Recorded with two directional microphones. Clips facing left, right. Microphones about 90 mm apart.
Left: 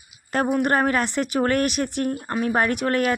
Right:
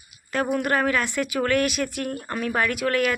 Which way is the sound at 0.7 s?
40° left (ahead or behind).